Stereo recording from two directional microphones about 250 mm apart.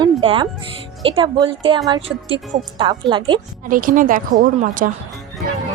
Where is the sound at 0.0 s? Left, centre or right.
Centre.